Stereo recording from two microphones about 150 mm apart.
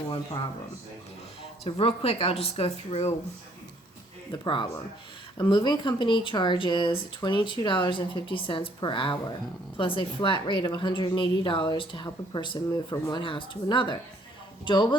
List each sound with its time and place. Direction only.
0.1 s a woman's voice: 30° left (ahead or behind)
1.6 s a woman's voice: 40° left (ahead or behind)
4.3 s a woman's voice: 35° left (ahead or behind)